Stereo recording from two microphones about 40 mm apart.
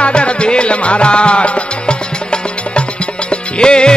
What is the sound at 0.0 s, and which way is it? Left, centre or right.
Music, left.